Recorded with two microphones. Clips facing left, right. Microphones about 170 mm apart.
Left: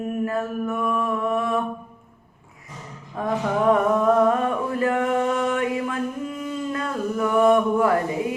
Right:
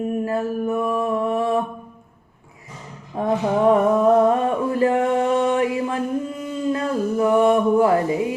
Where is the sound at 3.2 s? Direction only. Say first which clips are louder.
Right 3 dB; 30° right (ahead or behind).